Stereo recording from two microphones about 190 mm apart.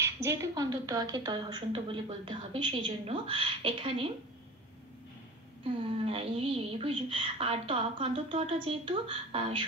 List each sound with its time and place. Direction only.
0.0 s a woman's voice: 15° right (ahead or behind)
5.6 s a woman's voice: 30° right (ahead or behind)